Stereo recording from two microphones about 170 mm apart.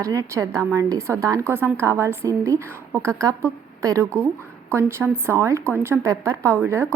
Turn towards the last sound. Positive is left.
turn(degrees=-15)  # may be behind; listen again after turning